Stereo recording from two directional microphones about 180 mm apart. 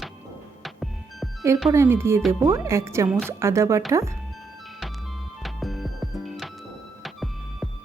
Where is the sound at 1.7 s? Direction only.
15° right (ahead or behind).